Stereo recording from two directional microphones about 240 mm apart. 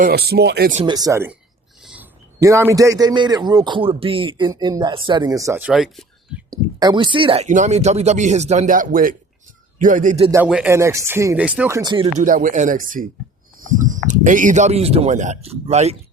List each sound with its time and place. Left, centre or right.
0.0 s speech: right
0.8 s a man's voice: centre
1.8 s a sound: centre
2.4 s a man's voice: centre
6.5 s speech: centre
10.3 s a man's voice: centre; by 16.0 s right